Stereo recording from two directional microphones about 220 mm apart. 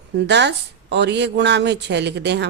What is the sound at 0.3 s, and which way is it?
A woman's voice, 50° right (ahead or behind).